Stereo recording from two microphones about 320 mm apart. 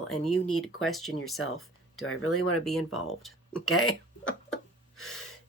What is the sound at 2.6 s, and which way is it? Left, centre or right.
Speech, centre.